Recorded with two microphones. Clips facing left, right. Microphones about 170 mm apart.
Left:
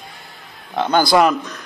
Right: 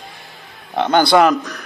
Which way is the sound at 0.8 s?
20° right (ahead or behind).